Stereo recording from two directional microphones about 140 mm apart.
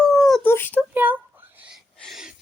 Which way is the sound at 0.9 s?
15° right (ahead or behind).